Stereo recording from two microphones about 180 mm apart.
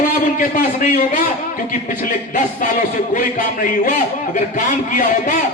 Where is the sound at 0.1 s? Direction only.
50° left (ahead or behind).